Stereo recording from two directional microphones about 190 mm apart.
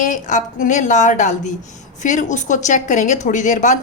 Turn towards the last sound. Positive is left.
turn(degrees=40)  # may be behind; listen again after turning